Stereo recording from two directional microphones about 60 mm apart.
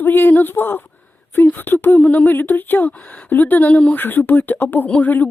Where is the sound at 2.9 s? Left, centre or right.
Left.